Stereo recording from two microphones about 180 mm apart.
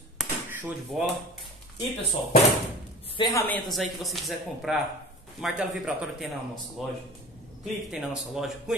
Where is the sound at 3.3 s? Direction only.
10° left (ahead or behind).